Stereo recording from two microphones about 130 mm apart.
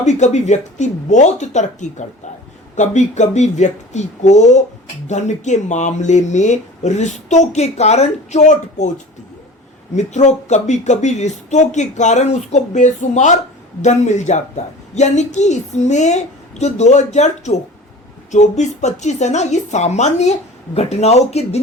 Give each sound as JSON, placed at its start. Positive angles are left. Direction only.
{"t": 0.0, "sound": "speech", "side_deg": 60}
{"t": 9.9, "sound": "speech", "side_deg": 60}